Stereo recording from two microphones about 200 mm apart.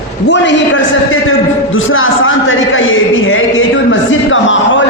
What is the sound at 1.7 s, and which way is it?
A man's voice, 80° left.